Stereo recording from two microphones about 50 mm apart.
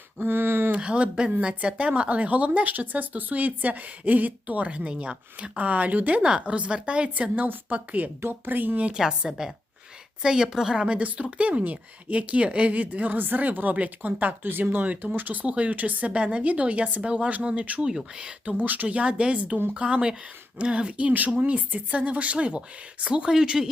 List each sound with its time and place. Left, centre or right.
0.2 s a sound: right
0.8 s a woman's voice: right
8.9 s a woman's voice: centre; by 15.4 s right
15.4 s speech: right
17.8 s a woman's voice: centre
18.4 s speech: right
23.3 s a woman's voice: centre